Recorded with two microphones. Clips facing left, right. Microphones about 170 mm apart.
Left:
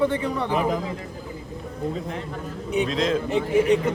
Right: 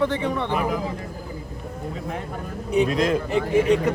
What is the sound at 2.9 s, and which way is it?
Speech, 60° right (ahead or behind).